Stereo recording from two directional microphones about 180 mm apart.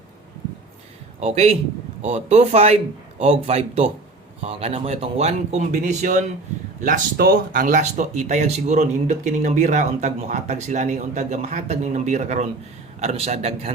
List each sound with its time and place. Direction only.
1.2 s speech: 35° right (ahead or behind)
6.8 s speech: 50° right (ahead or behind); by 13.7 s 35° right (ahead or behind)